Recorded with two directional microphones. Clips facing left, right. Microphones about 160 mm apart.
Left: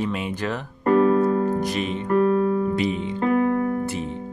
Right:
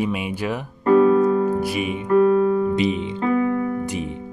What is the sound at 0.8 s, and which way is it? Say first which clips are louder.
Keyboard: right 3 dB; 40° left (ahead or behind).